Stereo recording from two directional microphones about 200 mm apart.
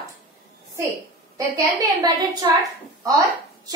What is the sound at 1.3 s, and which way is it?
A woman's voice, 15° right (ahead or behind).